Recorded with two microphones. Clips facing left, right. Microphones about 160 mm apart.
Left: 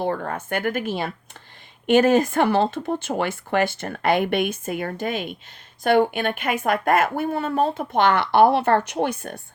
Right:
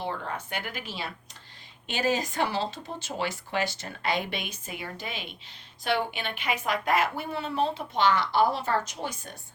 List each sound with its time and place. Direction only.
0.0 s speech: 55° left (ahead or behind)